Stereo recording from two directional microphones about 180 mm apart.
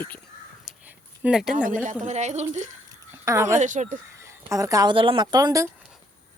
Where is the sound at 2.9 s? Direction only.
15° right (ahead or behind).